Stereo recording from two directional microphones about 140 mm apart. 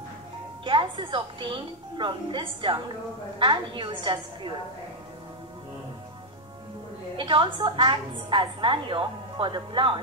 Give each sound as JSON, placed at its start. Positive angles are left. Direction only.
{"t": 0.7, "sound": "a woman's voice", "side_deg": -35}
{"t": 7.2, "sound": "a woman's voice", "side_deg": -35}